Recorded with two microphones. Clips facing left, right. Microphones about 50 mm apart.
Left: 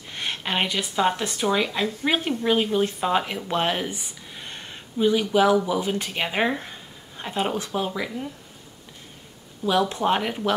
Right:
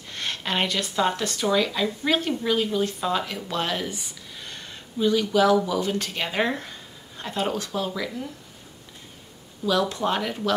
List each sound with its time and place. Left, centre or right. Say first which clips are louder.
0.1 s speech: left 1 dB; centre
9.7 s speech: left 2 dB; left